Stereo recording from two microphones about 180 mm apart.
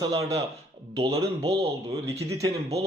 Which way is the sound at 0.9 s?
35° right (ahead or behind).